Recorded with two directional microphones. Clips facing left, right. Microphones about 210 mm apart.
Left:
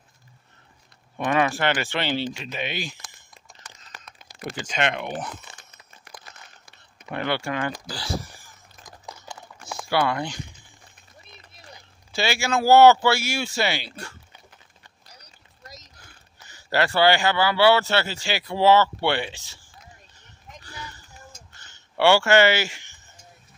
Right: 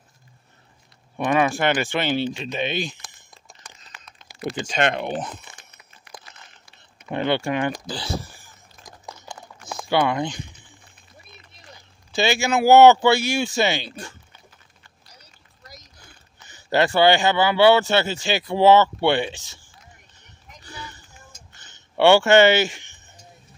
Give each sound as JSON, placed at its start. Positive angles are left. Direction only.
{"t": 1.1, "sound": "speech", "side_deg": -15}
{"t": 3.9, "sound": "a sound", "side_deg": 40}
{"t": 4.4, "sound": "speech", "side_deg": -20}
{"t": 4.7, "sound": "speech", "side_deg": -40}
{"t": 7.1, "sound": "speech", "side_deg": -20}
{"t": 9.7, "sound": "speech", "side_deg": -20}
{"t": 12.1, "sound": "speech", "side_deg": -20}
{"t": 16.4, "sound": "speech", "side_deg": -20}
{"t": 21.5, "sound": "a sound", "side_deg": -20}